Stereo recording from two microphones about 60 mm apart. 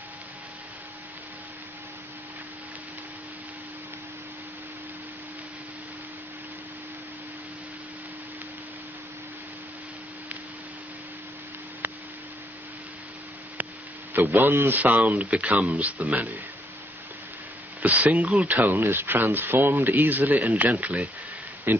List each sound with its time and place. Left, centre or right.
14.3 s speech: right
17.8 s speech: right